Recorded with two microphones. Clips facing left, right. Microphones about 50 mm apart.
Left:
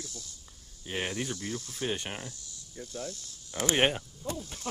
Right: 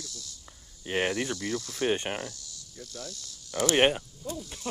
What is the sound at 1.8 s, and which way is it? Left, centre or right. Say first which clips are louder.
Speech: right 6 dB; right.